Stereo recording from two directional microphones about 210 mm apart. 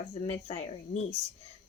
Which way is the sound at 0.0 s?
30° left (ahead or behind).